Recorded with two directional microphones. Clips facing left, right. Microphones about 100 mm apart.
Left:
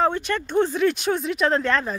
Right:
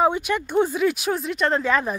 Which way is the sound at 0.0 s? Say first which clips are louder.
Right 2 dB; 10° right (ahead or behind).